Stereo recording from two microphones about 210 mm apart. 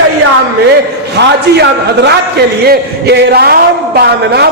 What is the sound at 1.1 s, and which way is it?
A man's voice, 50° right (ahead or behind).